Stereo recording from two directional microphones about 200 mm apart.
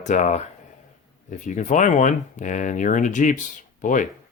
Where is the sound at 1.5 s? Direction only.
40° left (ahead or behind).